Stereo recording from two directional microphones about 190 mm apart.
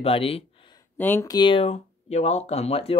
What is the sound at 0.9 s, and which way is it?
Speech, 10° left (ahead or behind).